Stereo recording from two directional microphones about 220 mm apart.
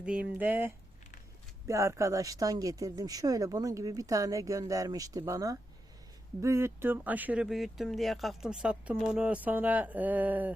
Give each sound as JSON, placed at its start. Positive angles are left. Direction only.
{"t": 0.0, "sound": "speech", "side_deg": -5}